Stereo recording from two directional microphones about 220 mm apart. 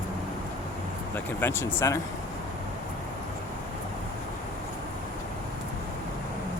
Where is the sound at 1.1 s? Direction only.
10° left (ahead or behind).